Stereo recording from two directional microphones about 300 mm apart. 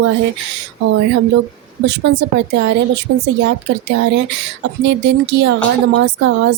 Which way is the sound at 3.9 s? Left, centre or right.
Right.